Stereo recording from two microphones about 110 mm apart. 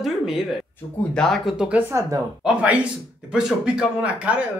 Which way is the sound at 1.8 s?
25° right (ahead or behind).